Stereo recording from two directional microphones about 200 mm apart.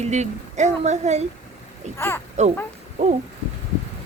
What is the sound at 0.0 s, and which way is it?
Speech, 35° right (ahead or behind).